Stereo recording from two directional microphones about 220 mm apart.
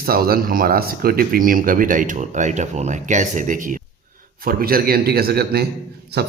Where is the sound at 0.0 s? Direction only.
45° right (ahead or behind).